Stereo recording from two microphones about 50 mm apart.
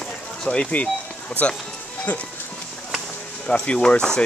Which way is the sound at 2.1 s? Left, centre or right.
Left.